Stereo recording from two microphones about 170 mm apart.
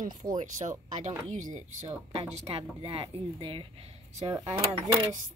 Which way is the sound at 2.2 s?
35° right (ahead or behind).